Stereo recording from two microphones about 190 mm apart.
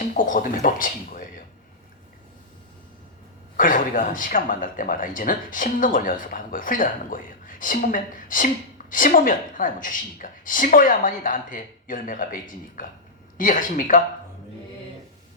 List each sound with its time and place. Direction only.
0.1 s speech: 45° left (ahead or behind)
3.6 s speech: 45° left (ahead or behind)